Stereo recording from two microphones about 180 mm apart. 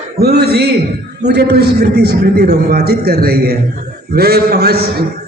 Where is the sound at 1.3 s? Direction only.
65° right (ahead or behind).